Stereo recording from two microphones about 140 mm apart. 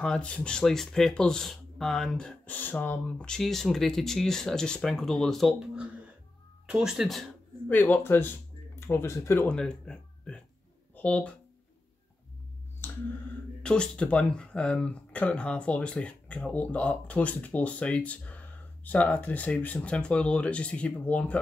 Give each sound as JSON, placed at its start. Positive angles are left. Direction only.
{"t": 0.0, "sound": "speech", "side_deg": 5}
{"t": 7.7, "sound": "speech", "side_deg": 15}
{"t": 9.6, "sound": "speech", "side_deg": 5}
{"t": 13.6, "sound": "speech", "side_deg": 5}